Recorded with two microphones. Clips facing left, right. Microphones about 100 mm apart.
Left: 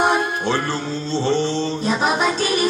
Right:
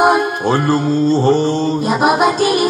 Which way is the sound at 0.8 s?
45° right (ahead or behind).